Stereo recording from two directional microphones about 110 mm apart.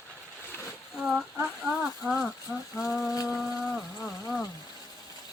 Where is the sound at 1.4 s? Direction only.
5° right (ahead or behind).